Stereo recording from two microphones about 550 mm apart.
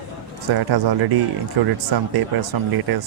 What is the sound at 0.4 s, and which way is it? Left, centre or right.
Speech, right.